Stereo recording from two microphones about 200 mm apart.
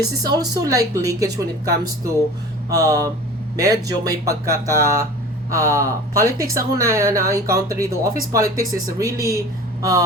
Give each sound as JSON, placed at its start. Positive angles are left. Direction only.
{"t": 0.2, "sound": "speech", "side_deg": -20}